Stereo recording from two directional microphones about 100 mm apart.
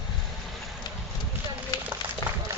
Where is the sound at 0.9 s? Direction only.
45° left (ahead or behind).